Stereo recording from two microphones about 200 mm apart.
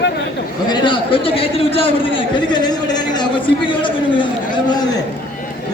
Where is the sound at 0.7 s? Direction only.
25° left (ahead or behind).